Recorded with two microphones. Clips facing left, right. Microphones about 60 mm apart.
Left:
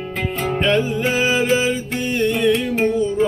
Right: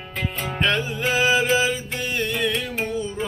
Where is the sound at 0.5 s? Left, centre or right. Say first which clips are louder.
Left 5 dB; centre.